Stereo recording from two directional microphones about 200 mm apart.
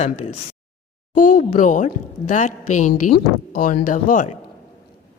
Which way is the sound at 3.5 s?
45° left (ahead or behind).